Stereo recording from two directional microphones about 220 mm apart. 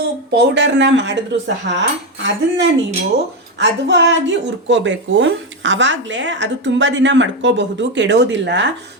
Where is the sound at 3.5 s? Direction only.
55° right (ahead or behind).